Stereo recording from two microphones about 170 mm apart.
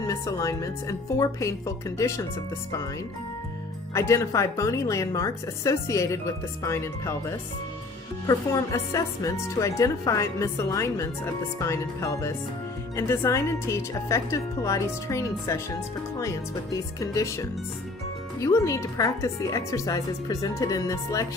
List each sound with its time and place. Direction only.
0.0 s a woman's voice: 20° left (ahead or behind)
3.9 s a woman's voice: 15° left (ahead or behind)